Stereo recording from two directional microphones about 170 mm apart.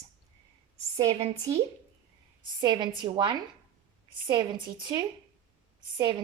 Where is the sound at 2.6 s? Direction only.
25° right (ahead or behind).